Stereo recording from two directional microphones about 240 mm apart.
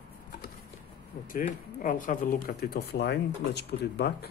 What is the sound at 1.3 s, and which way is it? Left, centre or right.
Speech, left.